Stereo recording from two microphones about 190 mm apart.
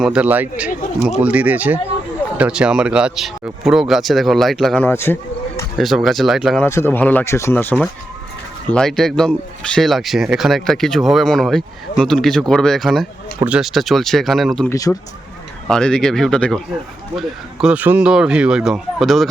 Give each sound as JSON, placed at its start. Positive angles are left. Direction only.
{"t": 0.0, "sound": "speech", "side_deg": -5}
{"t": 4.9, "sound": "speech", "side_deg": 10}
{"t": 5.7, "sound": "speech", "side_deg": 0}
{"t": 6.7, "sound": "speech", "side_deg": 10}
{"t": 14.7, "sound": "speech", "side_deg": 20}
{"t": 15.6, "sound": "speech", "side_deg": 5}